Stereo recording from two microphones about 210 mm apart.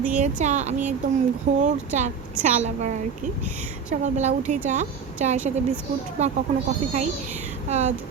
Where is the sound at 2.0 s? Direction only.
35° right (ahead or behind).